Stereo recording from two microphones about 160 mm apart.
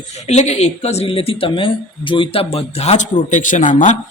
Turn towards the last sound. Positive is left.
turn(degrees=50)  # may be behind; listen again after turning